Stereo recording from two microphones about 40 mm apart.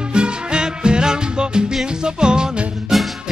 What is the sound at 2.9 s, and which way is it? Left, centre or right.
Music, centre.